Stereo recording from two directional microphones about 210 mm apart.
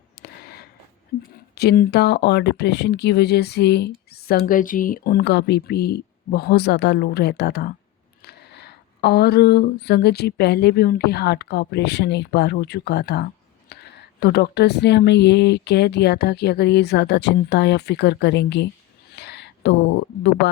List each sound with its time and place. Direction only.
0.2 s a sound: 45° left (ahead or behind)
1.5 s speech: 45° left (ahead or behind)
19.1 s whispering: 50° left (ahead or behind)
20.4 s speech: 55° left (ahead or behind)